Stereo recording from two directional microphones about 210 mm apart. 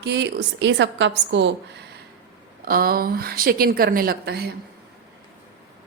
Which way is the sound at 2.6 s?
45° right (ahead or behind).